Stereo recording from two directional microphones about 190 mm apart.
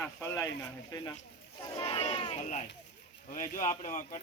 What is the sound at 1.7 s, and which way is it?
Speech, 30° left (ahead or behind).